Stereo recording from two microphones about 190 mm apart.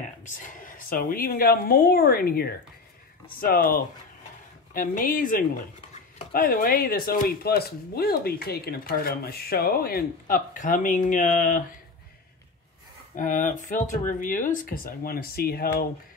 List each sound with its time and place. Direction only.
0.2 s speech: 45° left (ahead or behind)
13.1 s speech: 45° left (ahead or behind)